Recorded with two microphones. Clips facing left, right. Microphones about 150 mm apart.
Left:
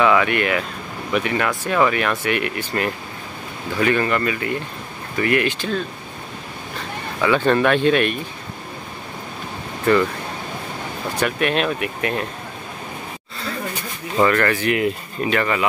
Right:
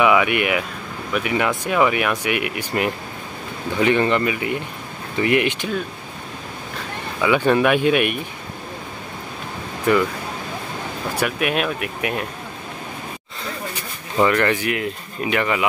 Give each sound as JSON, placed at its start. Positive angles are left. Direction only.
{"t": 0.0, "sound": "speech", "side_deg": -10}
{"t": 7.2, "sound": "speech", "side_deg": -10}
{"t": 11.1, "sound": "speech", "side_deg": -5}
{"t": 14.1, "sound": "speech", "side_deg": -15}
{"t": 14.7, "sound": "speech", "side_deg": 0}
{"t": 15.2, "sound": "speech", "side_deg": -15}